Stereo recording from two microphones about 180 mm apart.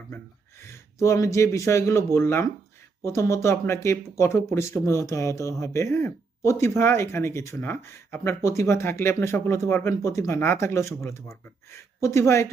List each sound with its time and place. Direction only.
0.6 s speech: 15° left (ahead or behind)